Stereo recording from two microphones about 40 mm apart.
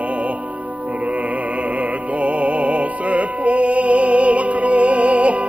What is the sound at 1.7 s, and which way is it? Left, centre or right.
Music, right.